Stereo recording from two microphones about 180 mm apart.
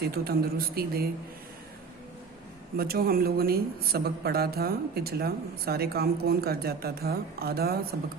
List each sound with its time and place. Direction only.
0.0 s a woman's voice: 60° right (ahead or behind)
2.7 s a woman's voice: 55° right (ahead or behind)